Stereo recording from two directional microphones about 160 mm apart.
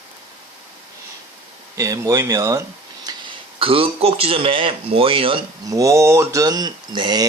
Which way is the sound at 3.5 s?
35° right (ahead or behind).